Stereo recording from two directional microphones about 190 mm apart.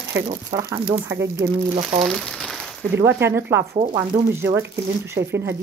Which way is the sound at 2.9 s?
10° right (ahead or behind).